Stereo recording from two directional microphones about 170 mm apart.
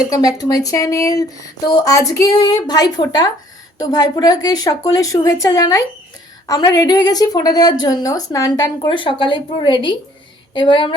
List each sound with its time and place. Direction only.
0.1 s a woman's voice: 20° left (ahead or behind)